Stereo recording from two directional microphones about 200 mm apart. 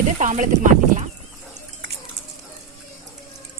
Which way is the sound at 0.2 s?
40° right (ahead or behind).